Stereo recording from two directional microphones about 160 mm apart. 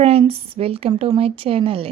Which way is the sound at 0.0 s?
35° right (ahead or behind).